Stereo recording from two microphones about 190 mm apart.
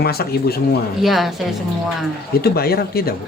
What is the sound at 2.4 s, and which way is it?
Speech, 55° left (ahead or behind).